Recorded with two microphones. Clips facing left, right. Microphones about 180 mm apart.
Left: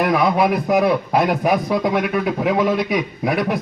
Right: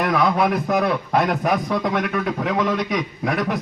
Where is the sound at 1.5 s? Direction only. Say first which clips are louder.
Left 3 dB; 15° left (ahead or behind).